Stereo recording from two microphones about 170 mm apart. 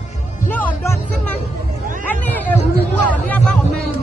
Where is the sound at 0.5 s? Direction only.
10° left (ahead or behind).